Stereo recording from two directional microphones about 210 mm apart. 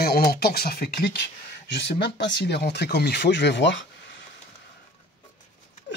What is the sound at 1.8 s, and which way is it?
Speech, 55° left (ahead or behind).